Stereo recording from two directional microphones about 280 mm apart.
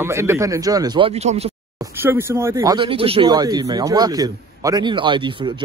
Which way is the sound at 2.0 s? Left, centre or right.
Centre.